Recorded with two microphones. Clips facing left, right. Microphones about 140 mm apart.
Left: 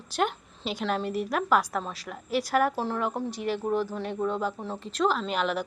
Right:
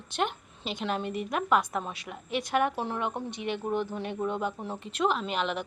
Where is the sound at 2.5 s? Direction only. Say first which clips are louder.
Left 1 dB; centre (ahead or behind).